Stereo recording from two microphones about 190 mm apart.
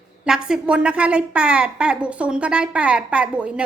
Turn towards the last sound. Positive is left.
turn(degrees=-5)  # may be behind; listen again after turning